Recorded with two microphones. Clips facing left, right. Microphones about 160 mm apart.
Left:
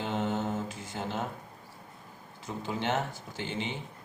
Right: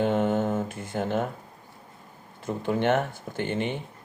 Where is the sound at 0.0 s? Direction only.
55° right (ahead or behind).